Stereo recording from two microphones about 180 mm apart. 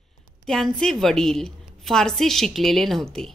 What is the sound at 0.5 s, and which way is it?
A woman's voice, centre (ahead or behind).